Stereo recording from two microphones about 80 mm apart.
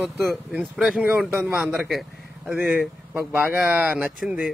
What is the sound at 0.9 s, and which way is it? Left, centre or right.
Speech, centre.